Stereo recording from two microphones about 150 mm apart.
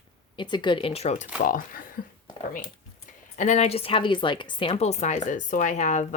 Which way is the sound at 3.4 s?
50° left (ahead or behind).